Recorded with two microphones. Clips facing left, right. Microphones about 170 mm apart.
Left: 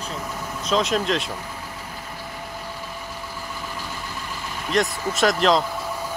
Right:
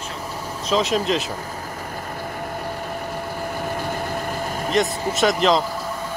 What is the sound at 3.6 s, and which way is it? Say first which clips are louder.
Vehicle: right 9 dB; 55° right (ahead or behind).